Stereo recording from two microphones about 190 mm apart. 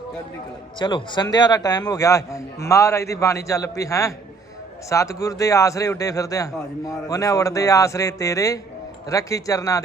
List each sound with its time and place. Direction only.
0.8 s a man's voice: 25° left (ahead or behind)